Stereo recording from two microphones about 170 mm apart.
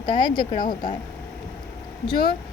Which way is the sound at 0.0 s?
25° left (ahead or behind).